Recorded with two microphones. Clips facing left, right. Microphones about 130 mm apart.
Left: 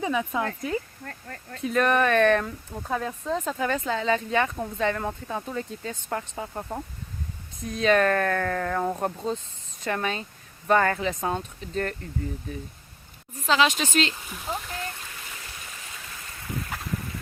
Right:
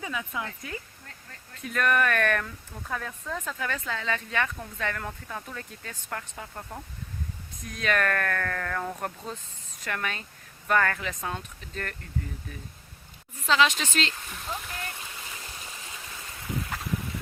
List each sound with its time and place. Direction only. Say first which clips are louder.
0.0 s speech: left 8 dB; 30° left (ahead or behind)
1.0 s speech: left 9 dB; 55° left (ahead or behind)
1.6 s speech: left 4 dB; 25° left (ahead or behind)
13.5 s speech: left 2 dB; 15° left (ahead or behind)